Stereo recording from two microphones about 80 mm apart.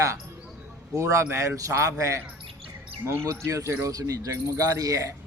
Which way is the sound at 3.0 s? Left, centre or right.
Right.